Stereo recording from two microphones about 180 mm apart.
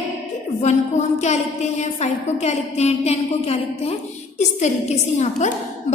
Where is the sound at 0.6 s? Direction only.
40° left (ahead or behind).